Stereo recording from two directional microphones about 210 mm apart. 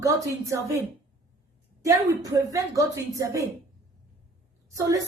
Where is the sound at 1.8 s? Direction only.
15° right (ahead or behind).